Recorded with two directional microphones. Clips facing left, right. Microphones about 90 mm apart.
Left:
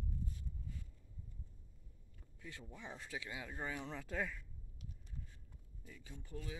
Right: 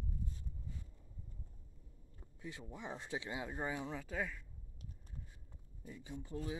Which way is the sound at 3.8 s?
5° right (ahead or behind).